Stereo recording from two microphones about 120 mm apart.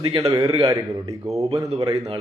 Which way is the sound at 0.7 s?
30° right (ahead or behind).